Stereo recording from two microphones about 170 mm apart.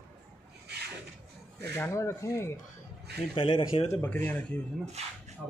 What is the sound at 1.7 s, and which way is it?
Speech, 15° left (ahead or behind).